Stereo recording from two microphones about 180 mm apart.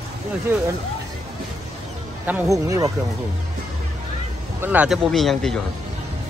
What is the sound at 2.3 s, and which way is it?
Speech, 15° right (ahead or behind).